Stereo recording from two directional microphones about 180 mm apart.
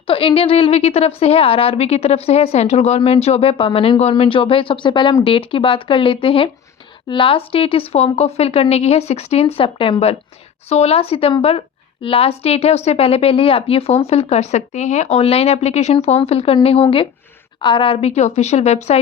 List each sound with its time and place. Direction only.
0.1 s a woman's voice: 30° left (ahead or behind)